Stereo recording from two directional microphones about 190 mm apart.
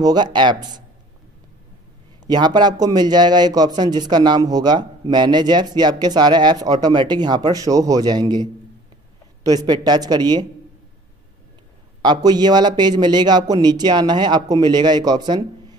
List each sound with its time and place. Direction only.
0.0 s speech: 20° right (ahead or behind)
2.2 s speech: 20° right (ahead or behind)
12.0 s speech: 20° right (ahead or behind)